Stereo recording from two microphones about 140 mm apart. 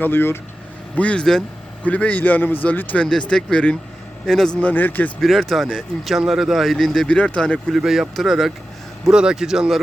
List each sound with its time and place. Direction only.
0.0 s a man's voice: 15° left (ahead or behind); by 9.8 s centre (ahead or behind)